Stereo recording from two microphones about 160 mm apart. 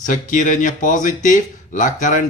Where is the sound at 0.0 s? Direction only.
55° left (ahead or behind).